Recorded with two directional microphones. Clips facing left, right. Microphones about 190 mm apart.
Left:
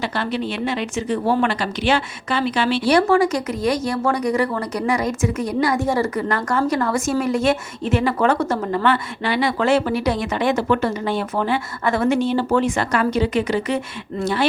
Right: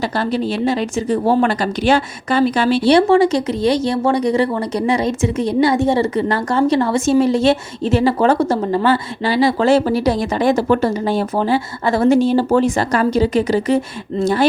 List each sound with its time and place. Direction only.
0.0 s speech: 40° right (ahead or behind)
2.8 s speech: 25° right (ahead or behind)